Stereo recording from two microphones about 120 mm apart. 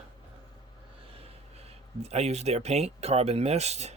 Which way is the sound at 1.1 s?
55° right (ahead or behind).